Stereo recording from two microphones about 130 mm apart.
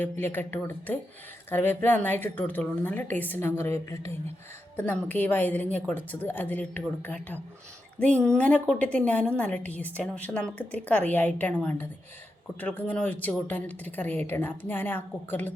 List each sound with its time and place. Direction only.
0.0 s speech: 15° left (ahead or behind)
4.8 s speech: 10° left (ahead or behind)